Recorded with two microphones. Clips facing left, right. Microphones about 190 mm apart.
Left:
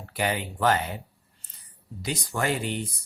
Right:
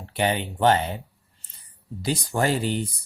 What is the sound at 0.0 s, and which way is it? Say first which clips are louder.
Speech: right 4 dB; 25° right (ahead or behind).